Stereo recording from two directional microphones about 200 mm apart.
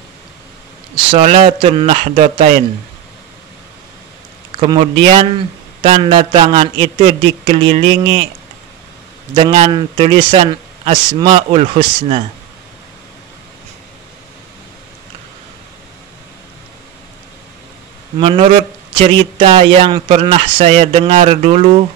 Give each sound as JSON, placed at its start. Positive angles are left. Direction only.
{"t": 0.9, "sound": "speech", "side_deg": -30}
{"t": 4.6, "sound": "speech", "side_deg": -25}
{"t": 9.3, "sound": "speech", "side_deg": -25}
{"t": 18.2, "sound": "speech", "side_deg": -25}